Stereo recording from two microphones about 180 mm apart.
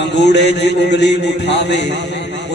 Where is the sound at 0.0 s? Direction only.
70° left (ahead or behind).